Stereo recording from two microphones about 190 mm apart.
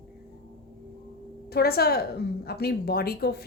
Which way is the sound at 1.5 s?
55° left (ahead or behind).